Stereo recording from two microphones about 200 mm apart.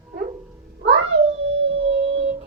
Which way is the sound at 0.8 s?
65° right (ahead or behind).